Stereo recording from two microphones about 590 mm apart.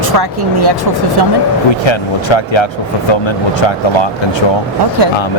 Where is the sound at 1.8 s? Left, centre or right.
Left.